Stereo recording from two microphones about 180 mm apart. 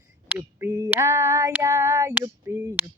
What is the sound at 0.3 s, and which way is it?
Female singing, 10° right (ahead or behind).